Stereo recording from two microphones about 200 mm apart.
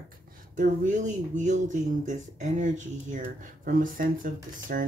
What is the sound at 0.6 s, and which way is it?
Speech, 40° right (ahead or behind).